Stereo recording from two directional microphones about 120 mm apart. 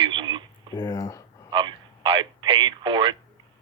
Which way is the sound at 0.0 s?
40° right (ahead or behind).